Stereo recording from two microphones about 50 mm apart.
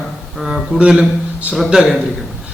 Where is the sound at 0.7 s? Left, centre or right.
Centre.